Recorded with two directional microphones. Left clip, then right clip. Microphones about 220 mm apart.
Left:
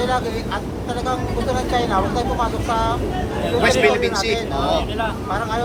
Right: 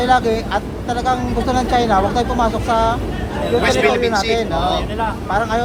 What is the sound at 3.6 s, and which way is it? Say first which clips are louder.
Speech: right 1 dB; centre (ahead or behind).